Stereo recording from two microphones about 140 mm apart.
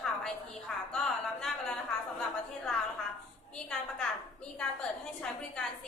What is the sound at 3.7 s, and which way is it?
A woman's voice, 5° left (ahead or behind).